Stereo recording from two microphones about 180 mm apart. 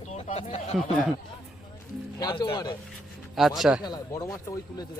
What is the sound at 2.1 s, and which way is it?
Speech, 20° left (ahead or behind).